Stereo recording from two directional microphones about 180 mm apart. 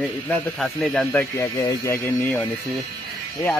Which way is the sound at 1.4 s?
15° left (ahead or behind).